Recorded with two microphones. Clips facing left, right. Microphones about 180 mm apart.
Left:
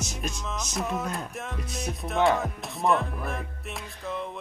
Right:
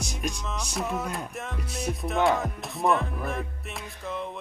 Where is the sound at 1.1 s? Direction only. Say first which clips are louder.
Even; centre (ahead or behind).